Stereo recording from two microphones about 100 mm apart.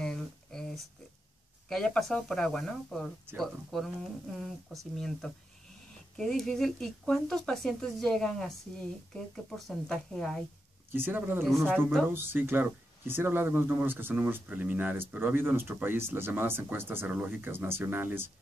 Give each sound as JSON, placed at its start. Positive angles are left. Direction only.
{"t": 0.0, "sound": "a sound", "side_deg": 5}
{"t": 1.7, "sound": "speech", "side_deg": 5}
{"t": 4.9, "sound": "speech", "side_deg": 5}
{"t": 10.9, "sound": "speech", "side_deg": -20}
{"t": 11.7, "sound": "speech", "side_deg": 5}
{"t": 12.1, "sound": "speech", "side_deg": -20}